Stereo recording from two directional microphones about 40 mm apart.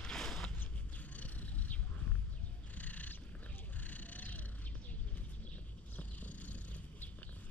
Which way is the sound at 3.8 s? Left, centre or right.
Left.